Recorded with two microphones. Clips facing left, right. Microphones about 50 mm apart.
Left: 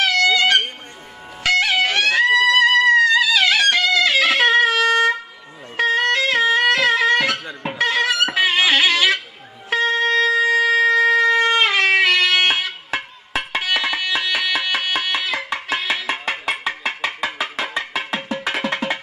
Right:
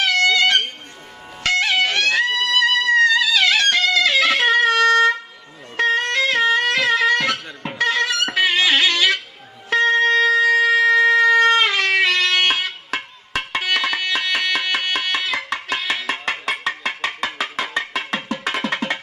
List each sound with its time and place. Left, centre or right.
0.0 s a sound: centre
1.4 s music: centre
9.7 s shofar: centre